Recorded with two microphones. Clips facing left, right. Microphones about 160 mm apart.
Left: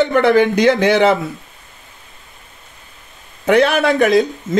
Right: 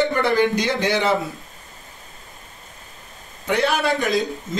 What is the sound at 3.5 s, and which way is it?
Speech, 70° left (ahead or behind).